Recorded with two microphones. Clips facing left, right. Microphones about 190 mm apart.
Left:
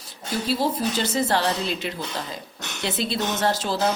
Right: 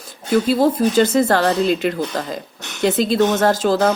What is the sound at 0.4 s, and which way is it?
Speech, 50° right (ahead or behind).